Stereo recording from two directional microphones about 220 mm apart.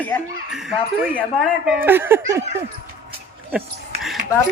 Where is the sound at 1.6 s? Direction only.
5° right (ahead or behind).